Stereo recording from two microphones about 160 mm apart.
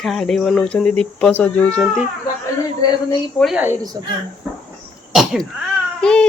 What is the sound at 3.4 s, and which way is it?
Speech, centre (ahead or behind).